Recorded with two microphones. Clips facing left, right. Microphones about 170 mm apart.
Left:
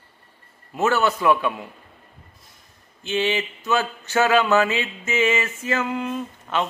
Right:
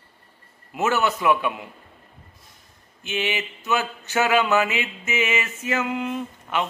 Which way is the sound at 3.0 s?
15° right (ahead or behind).